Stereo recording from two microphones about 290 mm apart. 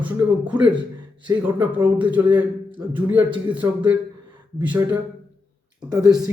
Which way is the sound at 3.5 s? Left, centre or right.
Centre.